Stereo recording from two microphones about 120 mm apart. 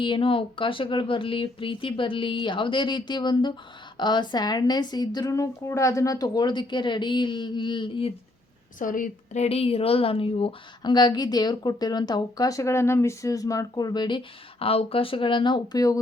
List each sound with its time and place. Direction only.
0.0 s a woman's voice: 45° left (ahead or behind)
8.8 s a woman's voice: 80° left; by 10.9 s 50° left (ahead or behind)
10.9 s a woman's voice: 35° left (ahead or behind)